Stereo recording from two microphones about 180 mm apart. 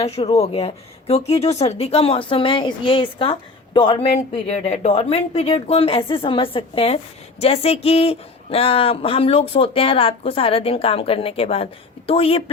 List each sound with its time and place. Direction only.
0.0 s a woman's voice: 35° left (ahead or behind)